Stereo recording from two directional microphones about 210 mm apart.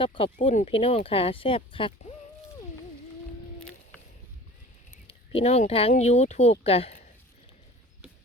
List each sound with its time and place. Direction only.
0.0 s speech: 25° left (ahead or behind)
5.0 s speech: 30° left (ahead or behind)